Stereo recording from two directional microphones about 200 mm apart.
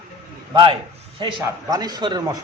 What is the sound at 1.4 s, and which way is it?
Speech, 20° right (ahead or behind).